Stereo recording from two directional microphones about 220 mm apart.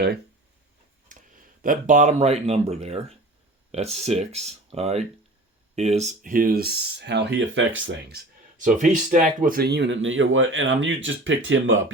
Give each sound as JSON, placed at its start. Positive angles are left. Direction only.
{"t": 1.0, "sound": "speech", "side_deg": -40}
{"t": 8.6, "sound": "speech", "side_deg": -35}